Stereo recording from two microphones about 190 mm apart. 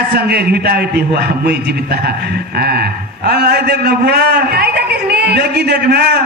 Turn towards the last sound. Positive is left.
turn(degrees=-60)  # may be behind; listen again after turning